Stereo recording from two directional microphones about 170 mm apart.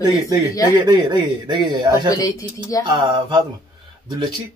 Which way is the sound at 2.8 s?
25° right (ahead or behind).